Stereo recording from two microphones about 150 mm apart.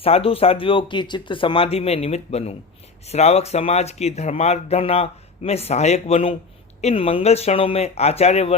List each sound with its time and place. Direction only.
0.0 s speech: 40° left (ahead or behind)